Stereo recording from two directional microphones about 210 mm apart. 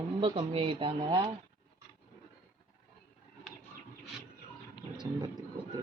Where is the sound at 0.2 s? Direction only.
25° right (ahead or behind).